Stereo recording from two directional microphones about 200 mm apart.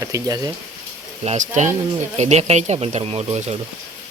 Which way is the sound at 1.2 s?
35° right (ahead or behind).